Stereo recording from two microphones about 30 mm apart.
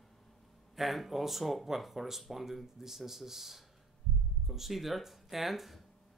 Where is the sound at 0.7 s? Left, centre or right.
Centre.